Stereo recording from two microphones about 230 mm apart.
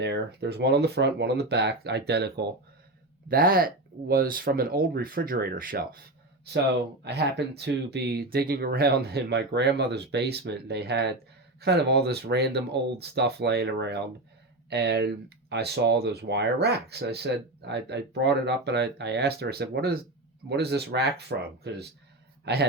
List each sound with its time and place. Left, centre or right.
0.0 s speech: right
7.0 s speech: right